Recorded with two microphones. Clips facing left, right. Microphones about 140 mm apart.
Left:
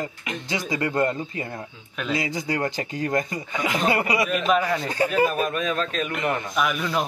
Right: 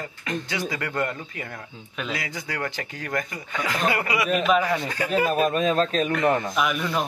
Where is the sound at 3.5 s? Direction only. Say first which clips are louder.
Left 1 dB; 15° left (ahead or behind).